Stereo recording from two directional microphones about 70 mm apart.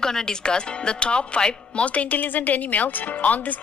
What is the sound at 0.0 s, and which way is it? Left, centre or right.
Speech, centre.